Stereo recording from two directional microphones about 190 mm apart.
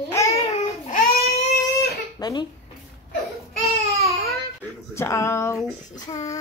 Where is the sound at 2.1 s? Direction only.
20° left (ahead or behind).